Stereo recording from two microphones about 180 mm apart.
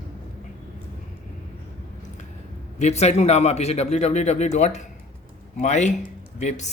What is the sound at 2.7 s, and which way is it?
A man's voice, 40° left (ahead or behind).